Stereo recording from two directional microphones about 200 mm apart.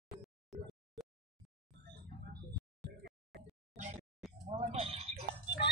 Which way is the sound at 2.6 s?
Centre (ahead or behind).